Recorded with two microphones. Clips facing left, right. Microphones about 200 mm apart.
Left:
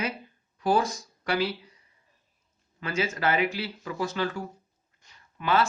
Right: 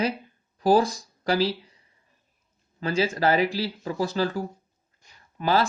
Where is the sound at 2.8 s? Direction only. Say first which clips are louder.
Right 5 dB; 35° right (ahead or behind).